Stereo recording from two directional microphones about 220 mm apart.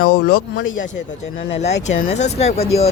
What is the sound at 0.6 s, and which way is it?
Speech, 65° left (ahead or behind).